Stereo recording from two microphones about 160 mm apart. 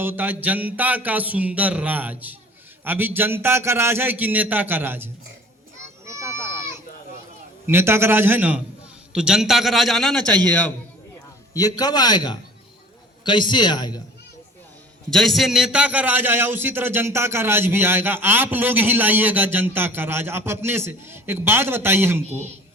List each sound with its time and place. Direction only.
0.0 s a man's voice: 10° right (ahead or behind)
5.8 s a sound: 15° right (ahead or behind)
7.7 s a man's voice: 15° right (ahead or behind); by 10.7 s 5° left (ahead or behind)
11.5 s a man's voice: 25° left (ahead or behind)
15.1 s a man's voice: centre (ahead or behind)